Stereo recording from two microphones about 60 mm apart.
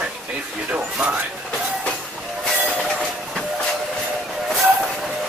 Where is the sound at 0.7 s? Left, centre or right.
Right.